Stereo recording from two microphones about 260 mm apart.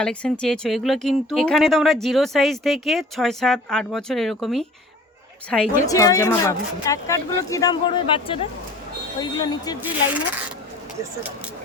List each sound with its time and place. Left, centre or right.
0.0 s speech: centre